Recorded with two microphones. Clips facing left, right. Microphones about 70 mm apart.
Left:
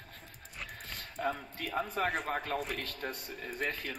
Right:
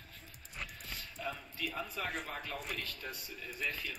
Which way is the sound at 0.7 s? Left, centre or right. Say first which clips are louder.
Left 4 dB; left.